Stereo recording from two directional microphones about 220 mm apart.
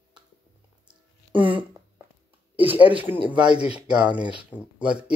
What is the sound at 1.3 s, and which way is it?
Speech, 25° right (ahead or behind).